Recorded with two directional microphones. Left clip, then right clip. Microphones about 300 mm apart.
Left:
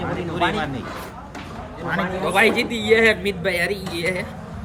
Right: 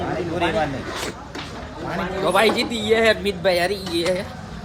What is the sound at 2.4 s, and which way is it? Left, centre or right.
Speech, centre.